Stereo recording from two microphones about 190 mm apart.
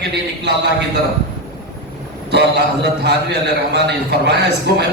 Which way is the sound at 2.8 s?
65° right (ahead or behind).